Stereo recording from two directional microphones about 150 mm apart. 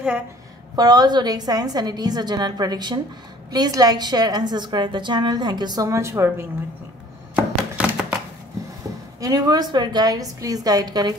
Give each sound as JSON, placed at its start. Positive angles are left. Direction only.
{"t": 0.7, "sound": "a woman's voice", "side_deg": -25}
{"t": 7.3, "sound": "music", "side_deg": -5}
{"t": 9.2, "sound": "a woman's voice", "side_deg": -25}